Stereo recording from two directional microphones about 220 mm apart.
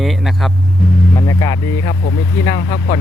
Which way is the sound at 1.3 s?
15° left (ahead or behind).